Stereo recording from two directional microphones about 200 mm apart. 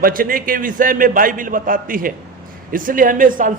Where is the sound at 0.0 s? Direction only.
45° right (ahead or behind).